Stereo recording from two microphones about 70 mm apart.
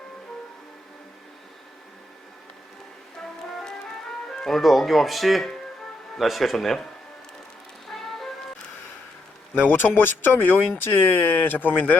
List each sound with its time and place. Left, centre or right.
4.4 s speech: centre
7.9 s music: centre
9.6 s speech: left